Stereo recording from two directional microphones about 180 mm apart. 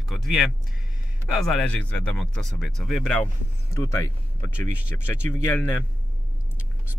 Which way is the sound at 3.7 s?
15° left (ahead or behind).